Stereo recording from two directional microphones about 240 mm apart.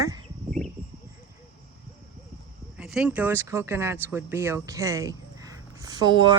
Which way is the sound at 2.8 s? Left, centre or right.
Centre.